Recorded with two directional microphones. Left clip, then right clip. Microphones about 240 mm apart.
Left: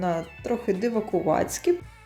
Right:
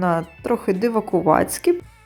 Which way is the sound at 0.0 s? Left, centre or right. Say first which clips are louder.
Right 6 dB; right.